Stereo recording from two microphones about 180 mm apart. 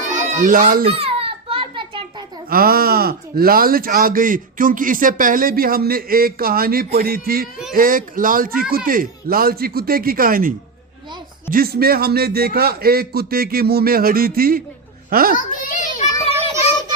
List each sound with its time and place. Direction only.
0.4 s speech: 50° right (ahead or behind)
0.9 s a sound: 30° right (ahead or behind)
2.5 s speech: 55° right (ahead or behind)
11.5 s speech: 60° right (ahead or behind)
15.4 s a child's voice: 45° left (ahead or behind)